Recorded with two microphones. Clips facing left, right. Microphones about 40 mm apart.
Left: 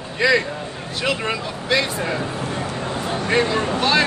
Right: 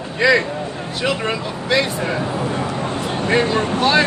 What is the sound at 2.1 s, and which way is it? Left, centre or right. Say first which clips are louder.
Speech: right 3 dB; right.